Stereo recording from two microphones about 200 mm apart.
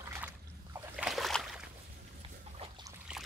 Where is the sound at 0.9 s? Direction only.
Centre (ahead or behind).